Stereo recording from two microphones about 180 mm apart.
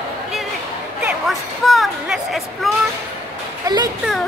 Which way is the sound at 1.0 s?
Centre (ahead or behind).